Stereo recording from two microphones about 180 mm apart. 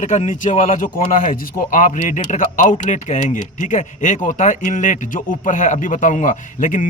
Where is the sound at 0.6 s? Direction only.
50° left (ahead or behind).